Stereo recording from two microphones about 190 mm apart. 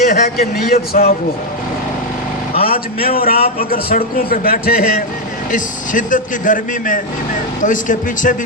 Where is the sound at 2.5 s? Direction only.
50° left (ahead or behind).